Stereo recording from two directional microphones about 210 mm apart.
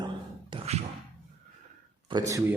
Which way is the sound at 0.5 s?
30° right (ahead or behind).